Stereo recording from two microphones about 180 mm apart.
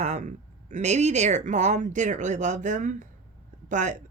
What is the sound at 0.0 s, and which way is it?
Speech, 40° right (ahead or behind).